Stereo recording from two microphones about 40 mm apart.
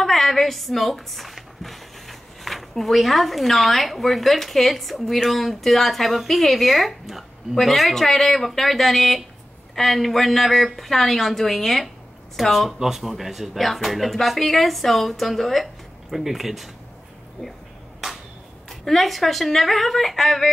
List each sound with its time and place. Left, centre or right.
0.0 s a woman's voice: centre
17.4 s speech: centre
18.0 s a sound: centre
18.7 s a woman's voice: centre